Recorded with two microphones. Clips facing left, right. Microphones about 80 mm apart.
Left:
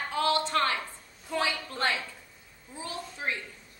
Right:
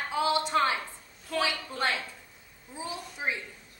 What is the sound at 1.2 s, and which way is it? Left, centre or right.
Speech, centre.